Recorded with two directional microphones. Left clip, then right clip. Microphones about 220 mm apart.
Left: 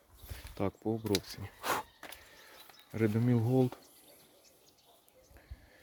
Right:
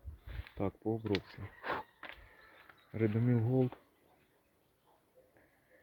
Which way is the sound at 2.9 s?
15° left (ahead or behind).